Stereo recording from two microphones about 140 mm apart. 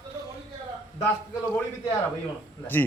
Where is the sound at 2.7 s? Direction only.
15° left (ahead or behind).